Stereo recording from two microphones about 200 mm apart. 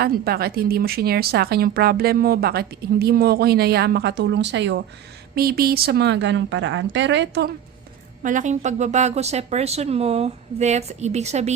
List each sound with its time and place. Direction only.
0.0 s speech: 50° right (ahead or behind)
5.3 s a woman's voice: 50° right (ahead or behind)
8.2 s speech: 40° right (ahead or behind)